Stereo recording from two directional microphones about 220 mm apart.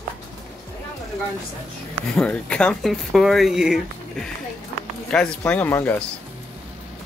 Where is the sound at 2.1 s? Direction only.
5° left (ahead or behind).